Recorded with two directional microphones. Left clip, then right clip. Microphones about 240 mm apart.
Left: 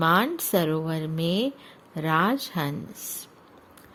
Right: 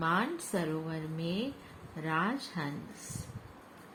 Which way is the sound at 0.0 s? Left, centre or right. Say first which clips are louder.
Left 9 dB; left.